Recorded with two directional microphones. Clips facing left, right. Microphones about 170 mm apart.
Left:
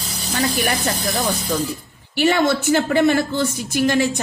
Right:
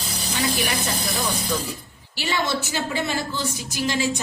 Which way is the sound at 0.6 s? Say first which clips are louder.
Left 4 dB; 45° left (ahead or behind).